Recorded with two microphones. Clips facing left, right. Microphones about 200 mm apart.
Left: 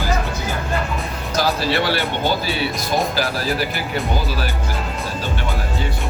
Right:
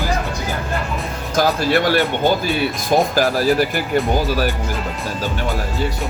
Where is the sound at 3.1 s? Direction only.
45° right (ahead or behind).